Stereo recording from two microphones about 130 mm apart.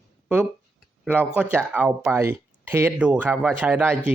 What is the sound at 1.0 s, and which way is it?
Speech, 15° right (ahead or behind).